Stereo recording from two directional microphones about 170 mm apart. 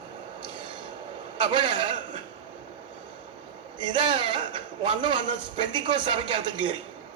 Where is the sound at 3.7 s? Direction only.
30° right (ahead or behind).